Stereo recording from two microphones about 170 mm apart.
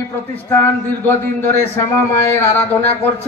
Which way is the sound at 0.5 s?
10° left (ahead or behind).